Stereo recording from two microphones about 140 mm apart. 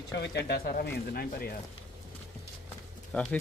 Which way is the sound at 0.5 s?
90° left.